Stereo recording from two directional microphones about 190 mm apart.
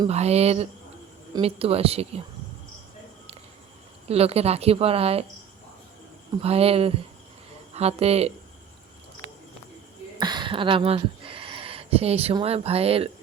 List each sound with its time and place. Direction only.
0.1 s a woman's voice: 35° right (ahead or behind)
4.1 s a woman's voice: 30° right (ahead or behind)
6.4 s a woman's voice: 30° right (ahead or behind)
10.2 s speech: 20° right (ahead or behind)